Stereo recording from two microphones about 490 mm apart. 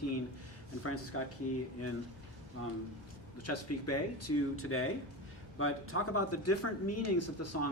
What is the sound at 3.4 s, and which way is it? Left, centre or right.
Speech, left.